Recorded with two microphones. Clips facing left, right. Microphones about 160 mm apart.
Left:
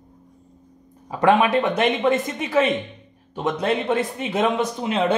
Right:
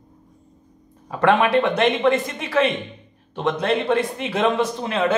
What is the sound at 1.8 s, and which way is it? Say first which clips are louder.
Speech: right 1 dB; 5° left (ahead or behind).